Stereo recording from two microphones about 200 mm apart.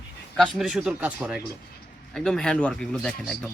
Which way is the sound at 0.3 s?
Centre (ahead or behind).